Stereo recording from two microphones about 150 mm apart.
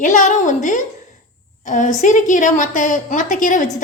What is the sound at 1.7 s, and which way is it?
A woman's voice, 55° left (ahead or behind).